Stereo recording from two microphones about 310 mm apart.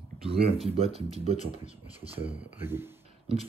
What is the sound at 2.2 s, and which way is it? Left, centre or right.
Speech, centre.